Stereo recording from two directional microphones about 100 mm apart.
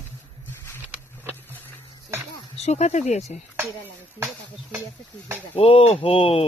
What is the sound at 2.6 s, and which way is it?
Speech, 90° left.